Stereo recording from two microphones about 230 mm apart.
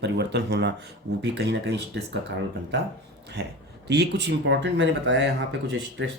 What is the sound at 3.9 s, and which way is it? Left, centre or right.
Speech, right.